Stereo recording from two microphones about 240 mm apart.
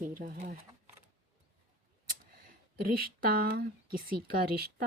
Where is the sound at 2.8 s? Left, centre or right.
Right.